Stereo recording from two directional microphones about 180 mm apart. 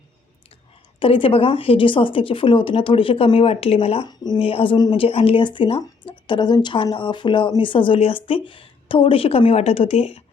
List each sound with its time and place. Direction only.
0.9 s a woman's voice: 30° left (ahead or behind)